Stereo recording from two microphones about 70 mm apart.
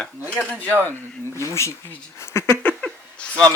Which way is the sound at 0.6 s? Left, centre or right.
Right.